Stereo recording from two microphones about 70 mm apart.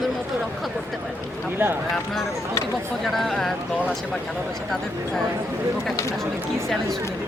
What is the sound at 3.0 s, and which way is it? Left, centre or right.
Speech, centre.